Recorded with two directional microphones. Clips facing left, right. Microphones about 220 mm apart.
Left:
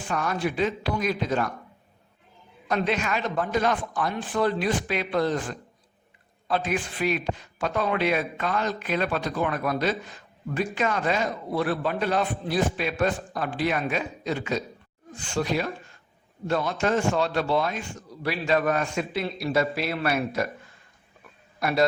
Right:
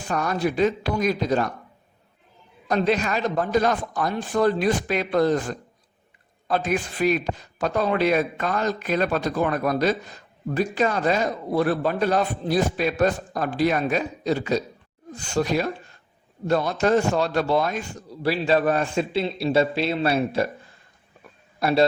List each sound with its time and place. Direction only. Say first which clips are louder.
0.1 s a man's voice: right 3 dB; 40° right (ahead or behind)
2.6 s a man's voice: right 4 dB; 40° right (ahead or behind)
21.6 s a man's voice: right 4 dB; 30° right (ahead or behind)